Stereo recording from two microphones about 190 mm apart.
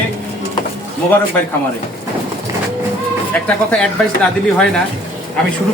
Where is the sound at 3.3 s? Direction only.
5° left (ahead or behind).